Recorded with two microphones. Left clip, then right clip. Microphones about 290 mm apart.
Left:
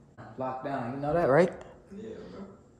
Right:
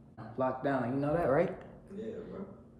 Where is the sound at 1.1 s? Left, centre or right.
Left.